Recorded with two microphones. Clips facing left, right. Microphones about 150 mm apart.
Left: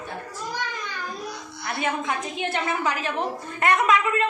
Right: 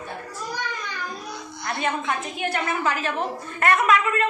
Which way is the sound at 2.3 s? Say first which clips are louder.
Even; 20° left (ahead or behind).